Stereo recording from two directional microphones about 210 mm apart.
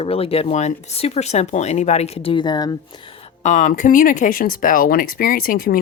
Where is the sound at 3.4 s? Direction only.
35° left (ahead or behind).